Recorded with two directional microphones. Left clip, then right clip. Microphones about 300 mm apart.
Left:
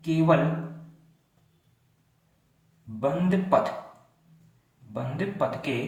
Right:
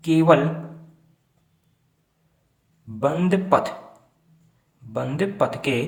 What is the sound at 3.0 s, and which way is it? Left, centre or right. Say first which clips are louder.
Speech: right 5 dB; right.